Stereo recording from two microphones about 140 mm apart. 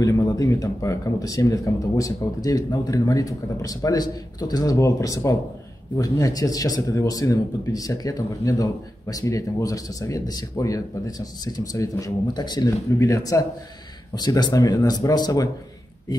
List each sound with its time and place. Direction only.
0.0 s speech: 25° left (ahead or behind)